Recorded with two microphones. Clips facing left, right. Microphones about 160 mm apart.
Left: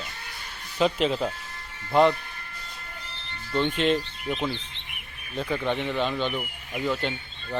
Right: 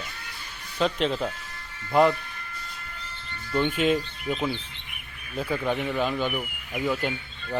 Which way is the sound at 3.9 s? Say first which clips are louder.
Right 1 dB; 30° left (ahead or behind).